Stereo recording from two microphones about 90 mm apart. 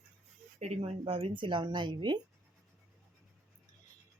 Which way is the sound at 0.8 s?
90° right.